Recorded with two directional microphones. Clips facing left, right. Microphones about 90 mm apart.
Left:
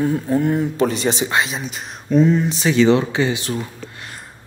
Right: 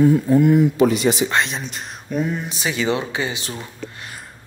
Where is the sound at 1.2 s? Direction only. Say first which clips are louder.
Left 1 dB; 5° left (ahead or behind); by 3.5 s 15° right (ahead or behind).